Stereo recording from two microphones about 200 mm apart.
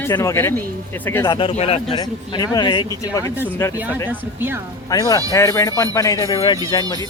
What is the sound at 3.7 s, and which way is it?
Speech, 10° right (ahead or behind).